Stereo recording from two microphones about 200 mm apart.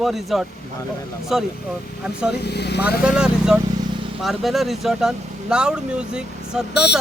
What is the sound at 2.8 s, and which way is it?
Speech, 5° right (ahead or behind).